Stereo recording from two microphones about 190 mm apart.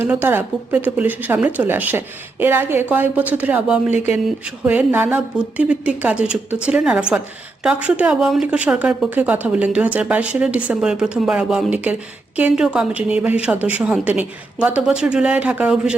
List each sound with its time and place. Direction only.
0.0 s a woman's voice: 10° right (ahead or behind)
3.9 s speech: 35° left (ahead or behind)
4.4 s a woman's voice: 10° right (ahead or behind)